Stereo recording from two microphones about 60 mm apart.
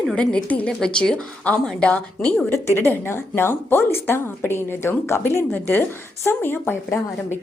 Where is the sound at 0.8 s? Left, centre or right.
Centre.